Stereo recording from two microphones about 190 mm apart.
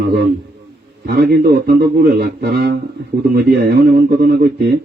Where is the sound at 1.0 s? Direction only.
60° right (ahead or behind).